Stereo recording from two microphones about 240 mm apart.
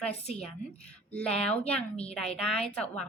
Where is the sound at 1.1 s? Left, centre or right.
Centre.